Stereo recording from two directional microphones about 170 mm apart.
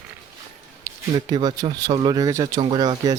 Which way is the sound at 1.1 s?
25° right (ahead or behind).